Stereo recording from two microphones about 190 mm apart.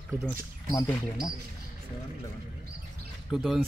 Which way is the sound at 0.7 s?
20° left (ahead or behind).